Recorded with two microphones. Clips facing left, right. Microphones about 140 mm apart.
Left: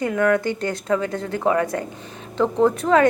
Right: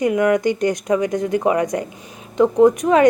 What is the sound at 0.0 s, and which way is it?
A woman's voice, 15° right (ahead or behind).